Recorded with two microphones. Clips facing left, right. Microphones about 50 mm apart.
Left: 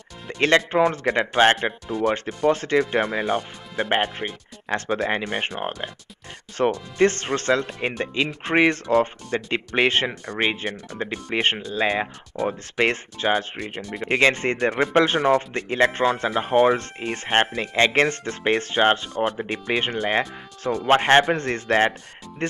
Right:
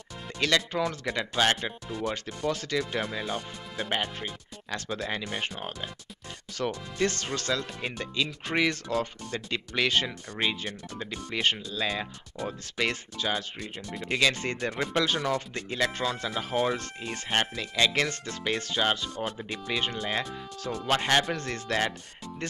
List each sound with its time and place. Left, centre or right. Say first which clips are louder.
0.3 s speech: left 8 dB; left